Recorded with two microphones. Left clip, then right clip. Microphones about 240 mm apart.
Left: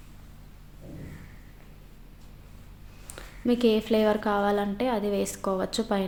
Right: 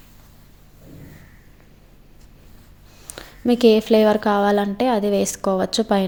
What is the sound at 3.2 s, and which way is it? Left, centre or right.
A woman's voice, right.